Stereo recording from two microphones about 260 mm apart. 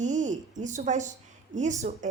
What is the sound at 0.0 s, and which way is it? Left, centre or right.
A woman's voice, right.